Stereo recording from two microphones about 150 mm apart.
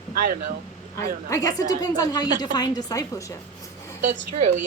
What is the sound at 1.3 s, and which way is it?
A woman's voice, 20° left (ahead or behind).